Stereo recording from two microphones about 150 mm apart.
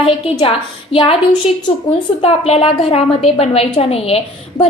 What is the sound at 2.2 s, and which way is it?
A woman's voice, 40° left (ahead or behind).